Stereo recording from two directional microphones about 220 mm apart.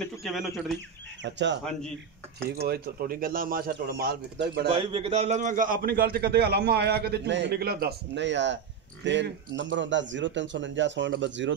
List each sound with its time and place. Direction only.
0.0 s speech: centre (ahead or behind)
1.2 s a man's voice: 55° right (ahead or behind)
1.6 s speech: 5° left (ahead or behind)
2.6 s speech: 45° right (ahead or behind)
4.6 s a man's voice: 25° right (ahead or behind); by 11.5 s 55° right (ahead or behind)